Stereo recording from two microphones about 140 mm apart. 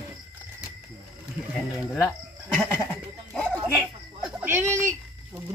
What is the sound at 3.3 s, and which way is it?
Dog, 5° left (ahead or behind).